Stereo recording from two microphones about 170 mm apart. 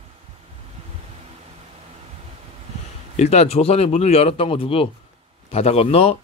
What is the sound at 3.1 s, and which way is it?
Speech, 40° left (ahead or behind).